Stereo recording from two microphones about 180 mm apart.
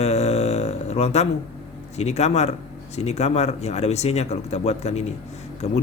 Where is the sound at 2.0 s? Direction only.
40° left (ahead or behind).